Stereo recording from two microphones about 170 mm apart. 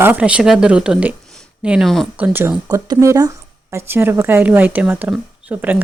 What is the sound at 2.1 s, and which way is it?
Speech, 10° right (ahead or behind).